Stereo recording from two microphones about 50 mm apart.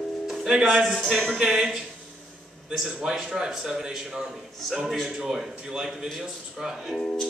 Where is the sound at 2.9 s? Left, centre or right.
Centre.